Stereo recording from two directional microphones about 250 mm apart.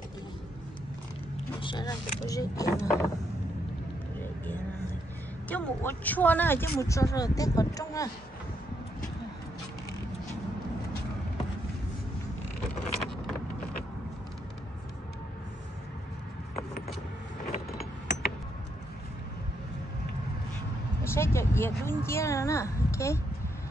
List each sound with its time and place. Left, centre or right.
1.6 s speech: centre
5.5 s speech: centre
17.5 s vehicle: left
21.0 s a sound: centre